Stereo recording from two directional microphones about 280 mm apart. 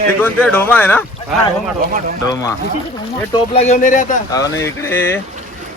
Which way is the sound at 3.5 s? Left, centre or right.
Left.